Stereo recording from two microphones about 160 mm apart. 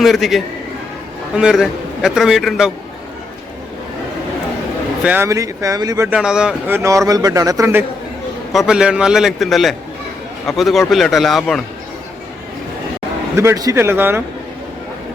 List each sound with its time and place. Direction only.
0.0 s a man's voice: centre (ahead or behind)
5.0 s speech: 15° right (ahead or behind)
6.1 s speech: 5° right (ahead or behind)
8.5 s a man's voice: 5° right (ahead or behind)
13.3 s speech: 15° right (ahead or behind)